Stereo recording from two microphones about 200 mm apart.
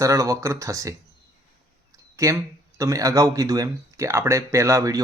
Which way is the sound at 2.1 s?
15° right (ahead or behind).